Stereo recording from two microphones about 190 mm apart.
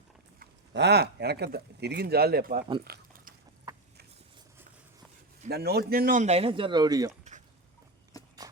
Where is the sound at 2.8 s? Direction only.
55° right (ahead or behind).